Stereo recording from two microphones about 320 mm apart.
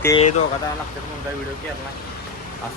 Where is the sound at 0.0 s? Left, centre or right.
Centre.